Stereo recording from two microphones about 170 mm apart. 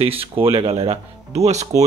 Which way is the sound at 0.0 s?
35° right (ahead or behind).